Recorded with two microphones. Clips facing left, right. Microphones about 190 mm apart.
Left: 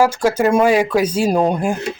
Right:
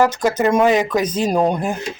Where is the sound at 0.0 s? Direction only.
10° left (ahead or behind).